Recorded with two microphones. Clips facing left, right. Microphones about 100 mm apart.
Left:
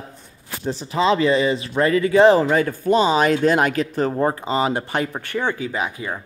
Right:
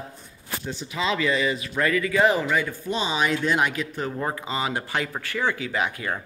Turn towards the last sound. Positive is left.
turn(degrees=25)  # may be behind; listen again after turning